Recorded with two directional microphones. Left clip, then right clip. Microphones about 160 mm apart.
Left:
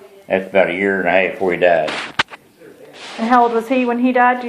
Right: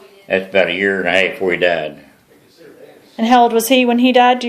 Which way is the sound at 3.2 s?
80° right.